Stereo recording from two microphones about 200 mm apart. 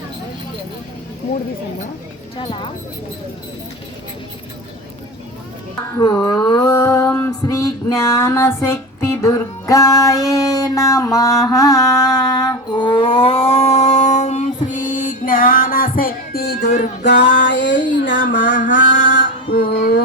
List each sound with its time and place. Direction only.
2.4 s speech: 25° left (ahead or behind)
6.0 s female singing: 20° left (ahead or behind); by 15.9 s 45° left (ahead or behind)
16.0 s music: 45° left (ahead or behind)
17.0 s a sound: 60° left (ahead or behind)
18.7 s mantra: 60° left (ahead or behind)
19.5 s music: 50° left (ahead or behind)